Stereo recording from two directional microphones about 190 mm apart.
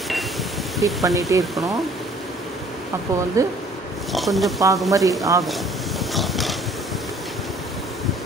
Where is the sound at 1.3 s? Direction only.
15° right (ahead or behind).